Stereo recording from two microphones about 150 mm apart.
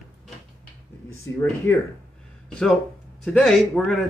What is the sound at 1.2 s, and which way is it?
Speech, 20° left (ahead or behind).